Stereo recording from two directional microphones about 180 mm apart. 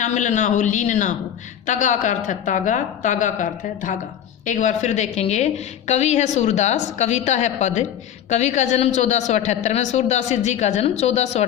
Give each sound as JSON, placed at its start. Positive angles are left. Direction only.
{"t": 0.0, "sound": "a woman's voice", "side_deg": 45}